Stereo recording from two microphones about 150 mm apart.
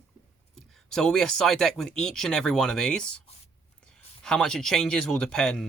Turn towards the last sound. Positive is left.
turn(degrees=5)  # may be behind; listen again after turning